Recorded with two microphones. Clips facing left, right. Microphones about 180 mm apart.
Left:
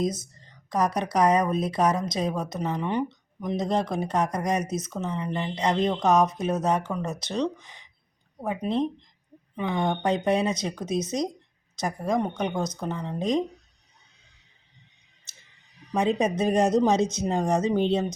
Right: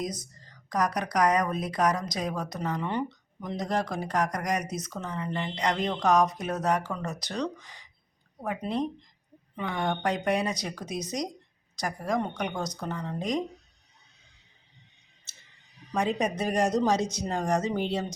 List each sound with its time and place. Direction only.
0.0 s speech: 25° left (ahead or behind)
15.3 s clicking: 15° left (ahead or behind)
15.9 s speech: 20° left (ahead or behind)